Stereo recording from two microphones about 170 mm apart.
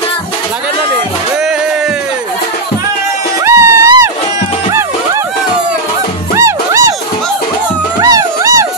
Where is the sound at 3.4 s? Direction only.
15° right (ahead or behind).